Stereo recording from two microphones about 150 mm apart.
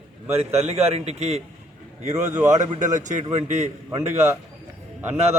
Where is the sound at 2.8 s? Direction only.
55° right (ahead or behind).